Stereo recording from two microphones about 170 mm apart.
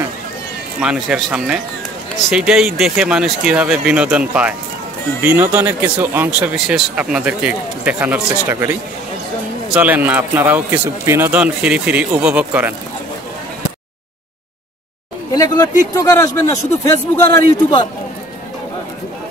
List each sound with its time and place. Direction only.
0.7 s speech: 5° right (ahead or behind)
9.8 s speech: 10° right (ahead or behind)
15.3 s a man's voice: 20° left (ahead or behind)
17.5 s a man's voice: 30° left (ahead or behind)